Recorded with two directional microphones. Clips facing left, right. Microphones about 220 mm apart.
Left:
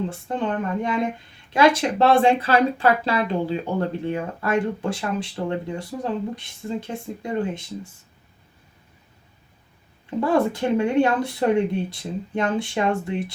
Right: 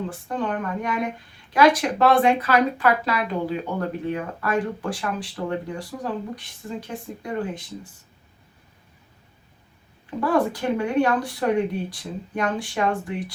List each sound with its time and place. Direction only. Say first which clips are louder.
0.1 s speech: left 1 dB; 25° left (ahead or behind)
10.2 s speech: left 2 dB; 25° left (ahead or behind)